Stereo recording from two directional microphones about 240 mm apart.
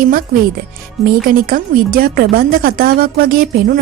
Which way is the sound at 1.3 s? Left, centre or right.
Right.